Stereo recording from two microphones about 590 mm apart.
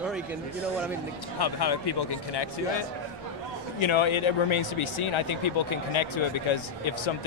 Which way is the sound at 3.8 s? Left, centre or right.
Left.